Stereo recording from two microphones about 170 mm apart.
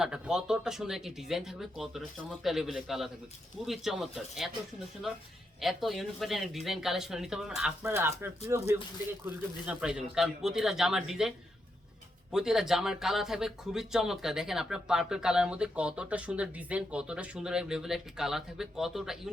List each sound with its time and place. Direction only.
0.0 s speech: 5° right (ahead or behind)
5.5 s speech: centre (ahead or behind)